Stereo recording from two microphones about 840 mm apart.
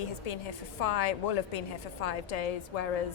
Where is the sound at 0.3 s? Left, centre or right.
Left.